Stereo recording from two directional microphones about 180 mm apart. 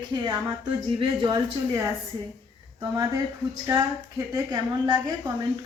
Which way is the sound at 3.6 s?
20° right (ahead or behind).